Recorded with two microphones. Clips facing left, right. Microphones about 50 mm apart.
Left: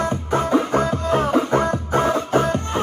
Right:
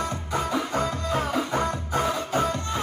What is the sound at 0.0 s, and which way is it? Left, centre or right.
Music, left.